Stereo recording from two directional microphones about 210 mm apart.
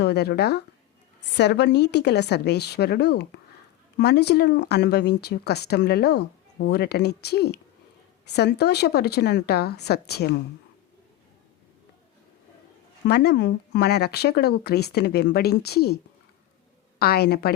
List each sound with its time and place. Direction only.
0.0 s speech: 50° left (ahead or behind)
13.1 s speech: 50° left (ahead or behind)
17.0 s speech: 50° left (ahead or behind)